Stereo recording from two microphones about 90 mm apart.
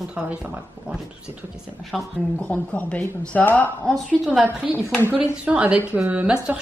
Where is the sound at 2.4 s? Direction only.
15° left (ahead or behind).